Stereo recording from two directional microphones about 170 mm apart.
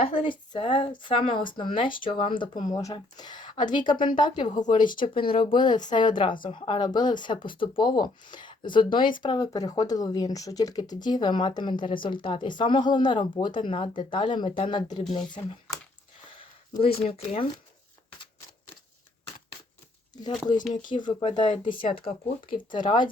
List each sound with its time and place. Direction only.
0.0 s speech: 35° left (ahead or behind)
20.8 s speech: 30° left (ahead or behind)